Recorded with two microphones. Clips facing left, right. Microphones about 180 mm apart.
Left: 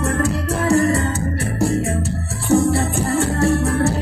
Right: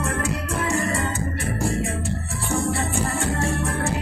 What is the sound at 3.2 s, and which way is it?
Music, 40° left (ahead or behind).